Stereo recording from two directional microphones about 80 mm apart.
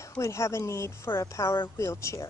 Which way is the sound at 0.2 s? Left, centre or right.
Left.